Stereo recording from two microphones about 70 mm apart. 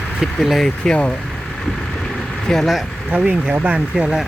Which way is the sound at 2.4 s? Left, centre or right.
Centre.